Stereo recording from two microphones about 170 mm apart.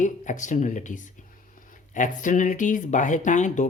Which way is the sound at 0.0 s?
45° left (ahead or behind).